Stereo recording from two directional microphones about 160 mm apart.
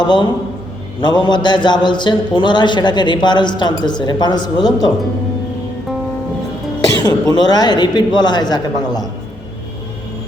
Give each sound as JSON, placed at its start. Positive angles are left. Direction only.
{"t": 0.0, "sound": "a man's voice", "side_deg": 30}
{"t": 7.0, "sound": "a man's voice", "side_deg": 25}